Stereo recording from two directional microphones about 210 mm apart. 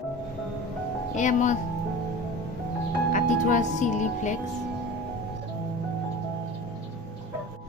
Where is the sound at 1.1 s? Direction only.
35° left (ahead or behind).